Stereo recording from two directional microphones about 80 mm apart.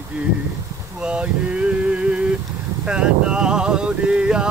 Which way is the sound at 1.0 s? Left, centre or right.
Centre.